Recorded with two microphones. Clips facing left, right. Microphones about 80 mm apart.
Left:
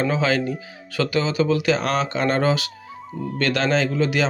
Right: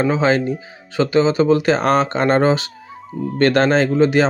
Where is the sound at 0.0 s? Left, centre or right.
Right.